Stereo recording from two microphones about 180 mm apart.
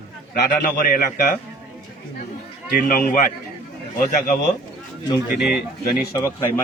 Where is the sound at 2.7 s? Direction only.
50° left (ahead or behind).